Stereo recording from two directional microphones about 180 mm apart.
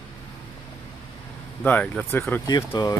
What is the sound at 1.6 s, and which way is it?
Speech, 10° left (ahead or behind).